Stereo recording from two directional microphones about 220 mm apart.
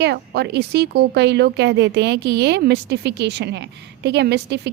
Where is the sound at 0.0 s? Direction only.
50° right (ahead or behind).